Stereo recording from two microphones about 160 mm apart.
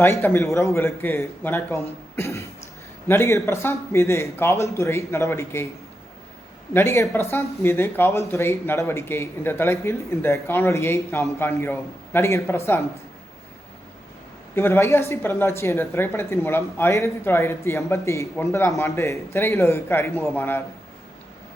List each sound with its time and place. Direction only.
0.0 s speech: 15° left (ahead or behind)
2.1 s cough: 20° left (ahead or behind)
3.1 s speech: 15° left (ahead or behind)
6.7 s speech: 15° left (ahead or behind)
14.5 s speech: 15° left (ahead or behind)